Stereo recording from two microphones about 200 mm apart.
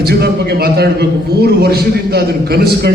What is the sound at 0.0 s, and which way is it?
A man's voice, 55° right (ahead or behind).